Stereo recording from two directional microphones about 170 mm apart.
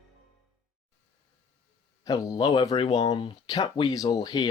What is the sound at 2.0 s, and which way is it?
Speech, 20° left (ahead or behind).